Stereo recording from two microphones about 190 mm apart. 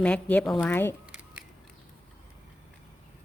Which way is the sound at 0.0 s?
5° left (ahead or behind).